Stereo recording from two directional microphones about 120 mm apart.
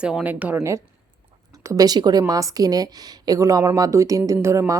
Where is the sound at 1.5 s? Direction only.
30° right (ahead or behind).